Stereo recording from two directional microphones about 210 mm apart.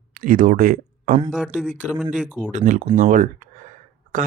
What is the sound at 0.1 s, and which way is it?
Speech, 40° right (ahead or behind).